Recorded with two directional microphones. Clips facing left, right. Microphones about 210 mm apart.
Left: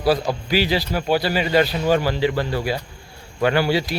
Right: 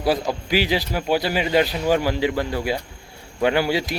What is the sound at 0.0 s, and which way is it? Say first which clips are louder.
Speech: left 2 dB; 15° right (ahead or behind).